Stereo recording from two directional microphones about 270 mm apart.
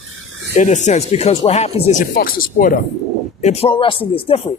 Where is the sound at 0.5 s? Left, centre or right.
Left.